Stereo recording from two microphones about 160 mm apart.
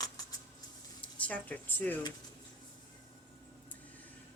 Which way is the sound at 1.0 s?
10° left (ahead or behind).